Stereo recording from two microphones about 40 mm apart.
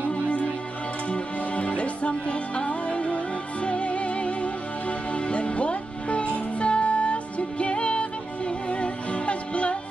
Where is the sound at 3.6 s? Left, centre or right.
Left.